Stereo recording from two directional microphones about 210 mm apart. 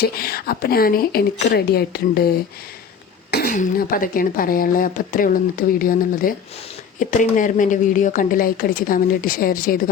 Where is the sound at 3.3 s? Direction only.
45° left (ahead or behind).